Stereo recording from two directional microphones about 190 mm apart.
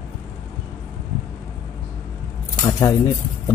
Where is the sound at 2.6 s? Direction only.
20° left (ahead or behind).